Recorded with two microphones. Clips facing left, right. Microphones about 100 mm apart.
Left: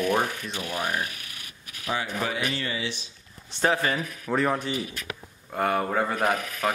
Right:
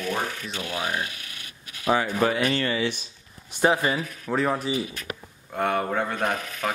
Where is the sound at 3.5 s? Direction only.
10° right (ahead or behind).